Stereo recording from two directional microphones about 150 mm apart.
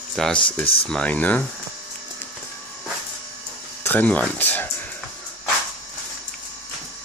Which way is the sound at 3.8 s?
10° left (ahead or behind).